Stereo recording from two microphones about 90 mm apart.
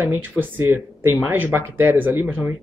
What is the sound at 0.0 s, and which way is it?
Speech, 20° right (ahead or behind).